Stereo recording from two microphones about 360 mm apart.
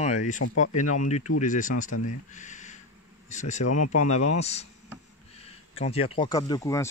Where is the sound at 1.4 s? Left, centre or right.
Left.